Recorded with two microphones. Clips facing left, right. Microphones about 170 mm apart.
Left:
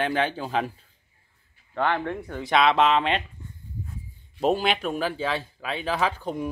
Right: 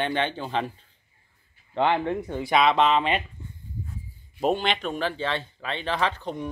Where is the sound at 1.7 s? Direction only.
15° right (ahead or behind).